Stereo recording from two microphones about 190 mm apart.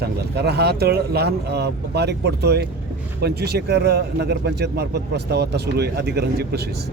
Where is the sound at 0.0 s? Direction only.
60° right (ahead or behind).